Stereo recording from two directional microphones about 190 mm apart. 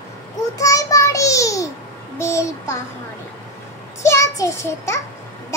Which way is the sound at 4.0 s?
15° left (ahead or behind).